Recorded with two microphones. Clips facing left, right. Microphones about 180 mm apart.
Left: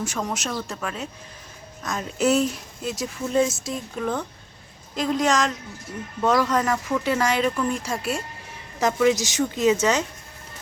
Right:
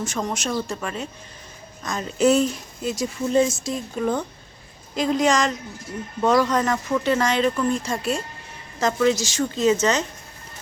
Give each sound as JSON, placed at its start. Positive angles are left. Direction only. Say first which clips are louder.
{"t": 0.0, "sound": "speech", "louder": "right 1 dB", "side_deg": 5}